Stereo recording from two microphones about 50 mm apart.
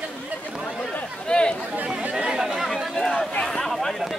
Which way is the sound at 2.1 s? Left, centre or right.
Centre.